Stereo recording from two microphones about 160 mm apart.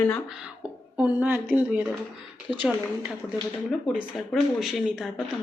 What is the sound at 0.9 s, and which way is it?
Speech, 10° right (ahead or behind).